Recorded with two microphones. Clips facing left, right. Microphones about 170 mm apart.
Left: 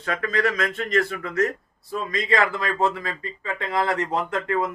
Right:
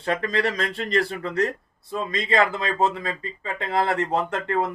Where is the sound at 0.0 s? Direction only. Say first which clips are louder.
Even; 30° right (ahead or behind).